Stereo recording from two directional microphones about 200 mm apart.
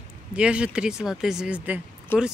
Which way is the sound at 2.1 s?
10° left (ahead or behind).